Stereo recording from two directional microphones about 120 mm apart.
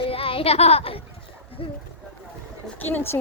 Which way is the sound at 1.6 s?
45° left (ahead or behind).